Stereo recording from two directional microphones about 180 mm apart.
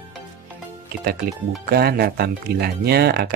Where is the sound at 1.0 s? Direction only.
60° right (ahead or behind).